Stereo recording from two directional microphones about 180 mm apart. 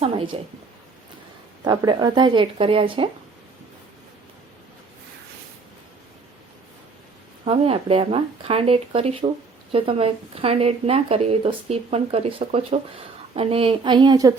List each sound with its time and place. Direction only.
0.0 s speech: 30° right (ahead or behind)
1.6 s speech: 25° right (ahead or behind)
7.4 s speech: 30° right (ahead or behind)